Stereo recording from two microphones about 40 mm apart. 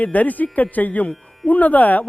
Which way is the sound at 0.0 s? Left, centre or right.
Left.